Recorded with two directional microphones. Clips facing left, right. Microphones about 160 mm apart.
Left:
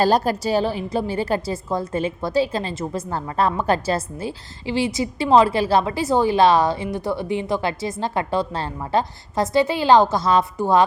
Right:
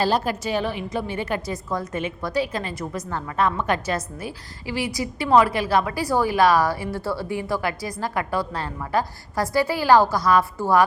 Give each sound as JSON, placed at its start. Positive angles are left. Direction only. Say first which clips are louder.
{"t": 0.0, "sound": "a woman's voice", "louder": "left 4 dB", "side_deg": 40}